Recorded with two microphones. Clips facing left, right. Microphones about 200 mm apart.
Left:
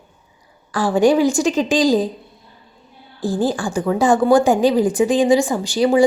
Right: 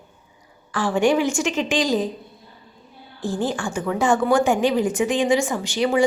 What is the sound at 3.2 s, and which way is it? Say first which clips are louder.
A woman's voice: left 5 dB; 35° left (ahead or behind).